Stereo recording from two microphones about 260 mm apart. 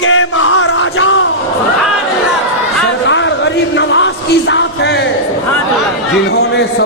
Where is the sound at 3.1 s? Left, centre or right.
Left.